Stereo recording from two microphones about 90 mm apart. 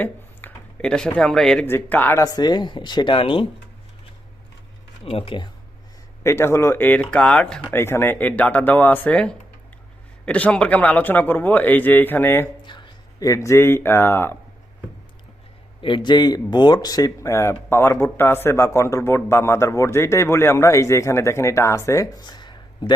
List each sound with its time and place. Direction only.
0.0 s a sound: 15° left (ahead or behind)
1.6 s a man's voice: 25° left (ahead or behind)
2.2 s speech: 50° left (ahead or behind); by 3.4 s 75° left (ahead or behind)
5.0 s speech: 90° left
6.2 s a man's voice: 30° left (ahead or behind)
7.0 s speech: 10° left (ahead or behind)
7.7 s a man's voice: 25° left (ahead or behind)
12.6 s a sound: 60° left (ahead or behind)
13.1 s a man's voice: 40° left (ahead or behind)
15.8 s speech: 60° left (ahead or behind); by 22.1 s 35° left (ahead or behind)
22.2 s a sound: 55° left (ahead or behind)